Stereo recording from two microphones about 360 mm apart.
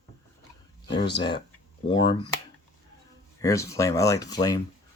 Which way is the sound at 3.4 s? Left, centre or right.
Centre.